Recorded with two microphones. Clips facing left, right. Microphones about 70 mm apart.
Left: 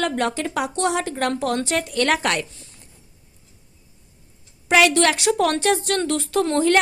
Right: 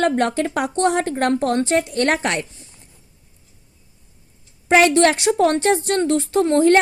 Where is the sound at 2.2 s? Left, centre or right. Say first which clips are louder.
Even; right.